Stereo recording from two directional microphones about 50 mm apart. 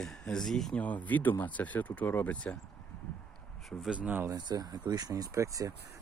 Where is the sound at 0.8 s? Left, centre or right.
Left.